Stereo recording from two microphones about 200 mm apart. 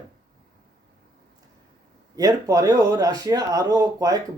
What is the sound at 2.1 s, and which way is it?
Speech, 15° right (ahead or behind).